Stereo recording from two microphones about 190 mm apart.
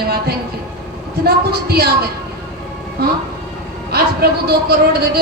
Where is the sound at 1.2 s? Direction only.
55° right (ahead or behind).